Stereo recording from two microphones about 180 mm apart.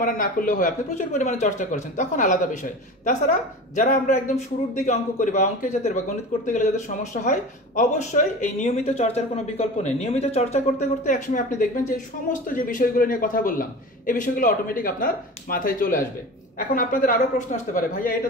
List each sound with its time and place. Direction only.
0.0 s speech: 50° left (ahead or behind)